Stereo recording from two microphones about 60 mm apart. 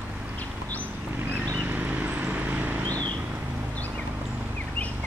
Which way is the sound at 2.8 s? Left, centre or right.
Left.